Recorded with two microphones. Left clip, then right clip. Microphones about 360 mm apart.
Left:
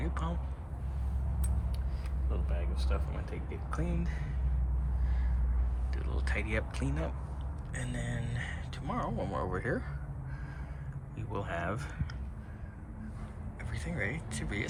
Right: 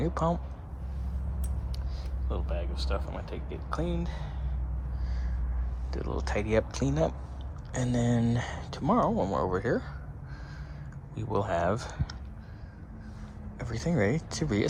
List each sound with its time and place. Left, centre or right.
0.0 s a man's voice: centre
2.3 s speech: centre
5.9 s speech: centre
11.1 s speech: centre
13.6 s speech: centre